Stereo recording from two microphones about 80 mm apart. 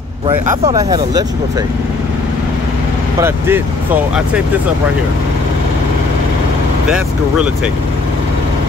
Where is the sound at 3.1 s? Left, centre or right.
Right.